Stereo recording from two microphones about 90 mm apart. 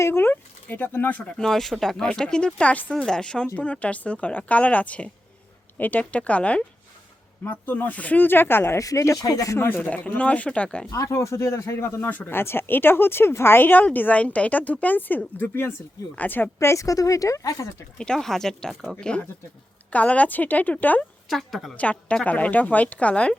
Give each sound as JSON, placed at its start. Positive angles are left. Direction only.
{"t": 0.0, "sound": "speech", "side_deg": 25}
{"t": 1.4, "sound": "a woman's voice", "side_deg": 5}
{"t": 9.6, "sound": "a woman's voice", "side_deg": 25}
{"t": 10.9, "sound": "speech", "side_deg": 35}
{"t": 16.6, "sound": "speech", "side_deg": 35}
{"t": 17.9, "sound": "speech", "side_deg": 5}
{"t": 18.9, "sound": "a woman's voice", "side_deg": 10}
{"t": 21.2, "sound": "a woman's voice", "side_deg": 0}
{"t": 21.8, "sound": "a woman's voice", "side_deg": 15}